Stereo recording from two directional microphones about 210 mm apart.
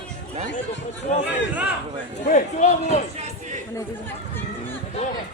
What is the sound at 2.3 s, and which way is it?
Speech, 35° left (ahead or behind).